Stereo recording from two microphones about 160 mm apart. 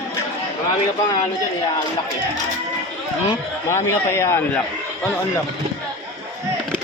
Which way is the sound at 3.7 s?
15° left (ahead or behind).